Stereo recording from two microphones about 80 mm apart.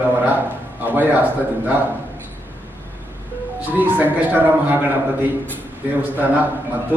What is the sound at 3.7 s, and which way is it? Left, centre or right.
A man's voice, right.